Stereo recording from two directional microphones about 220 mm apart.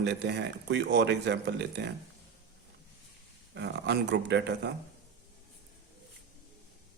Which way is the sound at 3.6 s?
50° right (ahead or behind).